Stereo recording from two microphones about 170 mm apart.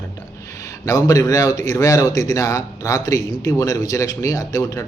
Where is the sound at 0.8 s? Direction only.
20° left (ahead or behind).